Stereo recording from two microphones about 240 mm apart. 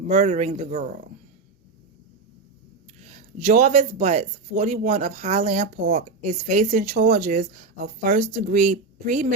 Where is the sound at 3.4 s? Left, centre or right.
Right.